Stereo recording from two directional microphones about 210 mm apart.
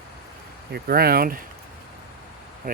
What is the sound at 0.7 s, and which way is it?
Speech, 50° right (ahead or behind).